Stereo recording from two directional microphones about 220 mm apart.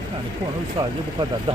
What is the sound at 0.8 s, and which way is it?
Speech, 25° right (ahead or behind).